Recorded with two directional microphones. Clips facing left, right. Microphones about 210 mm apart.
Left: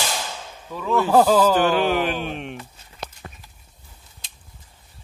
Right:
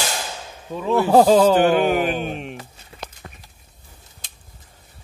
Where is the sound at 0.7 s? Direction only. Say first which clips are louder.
Right 2 dB; 25° right (ahead or behind).